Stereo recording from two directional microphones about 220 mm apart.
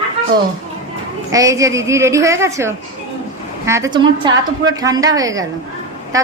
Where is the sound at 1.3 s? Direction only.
15° right (ahead or behind).